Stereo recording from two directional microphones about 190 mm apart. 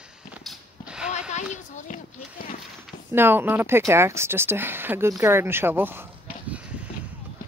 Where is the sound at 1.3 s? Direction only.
40° left (ahead or behind).